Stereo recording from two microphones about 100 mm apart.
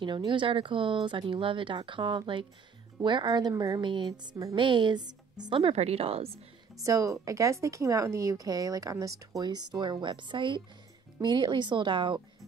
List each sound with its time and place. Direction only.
0.0 s a woman's voice: 50° right (ahead or behind)
3.8 s a woman's voice: 50° right (ahead or behind)
5.6 s a woman's voice: 80° right
6.8 s speech: 30° right (ahead or behind)
9.4 s a woman's voice: 45° right (ahead or behind)